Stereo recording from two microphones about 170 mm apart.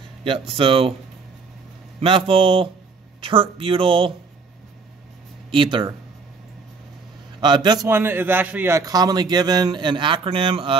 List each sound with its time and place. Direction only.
0.2 s speech: 30° right (ahead or behind)
2.0 s speech: 30° right (ahead or behind)
5.5 s a man's voice: 30° right (ahead or behind)
7.3 s a man's voice: 25° right (ahead or behind)